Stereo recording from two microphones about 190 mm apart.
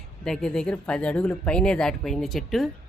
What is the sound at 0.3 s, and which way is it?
Speech, 5° left (ahead or behind).